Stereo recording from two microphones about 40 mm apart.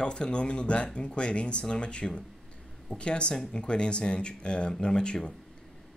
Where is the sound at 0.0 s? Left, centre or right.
Left.